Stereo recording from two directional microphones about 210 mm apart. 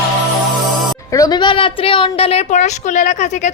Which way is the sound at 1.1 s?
15° left (ahead or behind).